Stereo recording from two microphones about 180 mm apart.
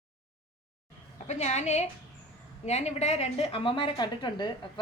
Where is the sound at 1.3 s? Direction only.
40° left (ahead or behind).